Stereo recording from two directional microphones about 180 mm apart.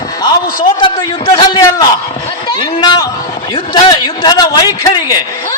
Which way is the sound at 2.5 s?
25° left (ahead or behind).